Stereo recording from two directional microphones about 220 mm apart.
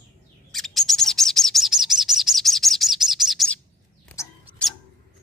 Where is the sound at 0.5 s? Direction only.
Centre (ahead or behind).